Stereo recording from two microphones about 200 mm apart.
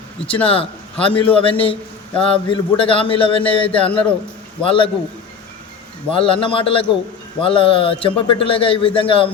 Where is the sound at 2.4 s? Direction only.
25° left (ahead or behind).